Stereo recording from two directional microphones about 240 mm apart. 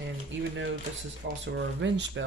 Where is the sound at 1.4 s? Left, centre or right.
Right.